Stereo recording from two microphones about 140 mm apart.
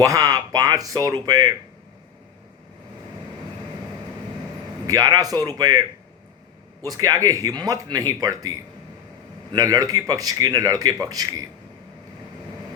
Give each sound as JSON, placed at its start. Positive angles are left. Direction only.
{"t": 0.0, "sound": "speech", "side_deg": -25}
{"t": 4.9, "sound": "speech", "side_deg": -25}
{"t": 6.8, "sound": "speech", "side_deg": -25}